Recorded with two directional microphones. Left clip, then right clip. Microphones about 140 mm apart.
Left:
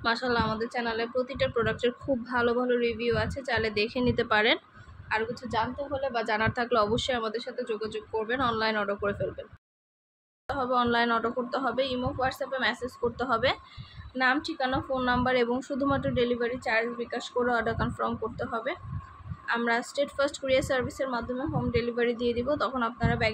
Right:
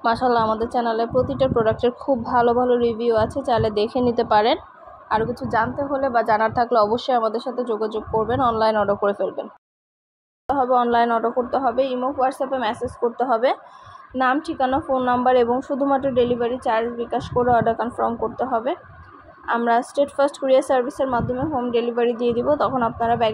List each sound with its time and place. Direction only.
0.0 s a woman's voice: 10° right (ahead or behind)
0.3 s a woman's voice: 25° right (ahead or behind)
1.6 s a woman's voice: 5° right (ahead or behind)
2.7 s a woman's voice: 25° right (ahead or behind)
4.0 s a woman's voice: 5° left (ahead or behind)
5.0 s a woman's voice: 25° right (ahead or behind)
5.9 s a woman's voice: 15° right (ahead or behind)
6.5 s speech: 10° left (ahead or behind)
7.3 s a woman's voice: 25° right (ahead or behind)
8.4 s a woman's voice: 15° right (ahead or behind)
13.2 s a woman's voice: centre (ahead or behind)
14.1 s a woman's voice: 20° right (ahead or behind)
17.5 s a woman's voice: 10° right (ahead or behind)